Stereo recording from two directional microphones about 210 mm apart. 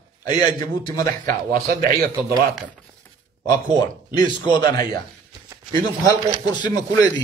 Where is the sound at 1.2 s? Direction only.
40° right (ahead or behind).